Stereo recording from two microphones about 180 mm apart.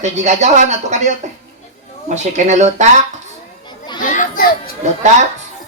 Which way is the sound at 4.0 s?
45° left (ahead or behind).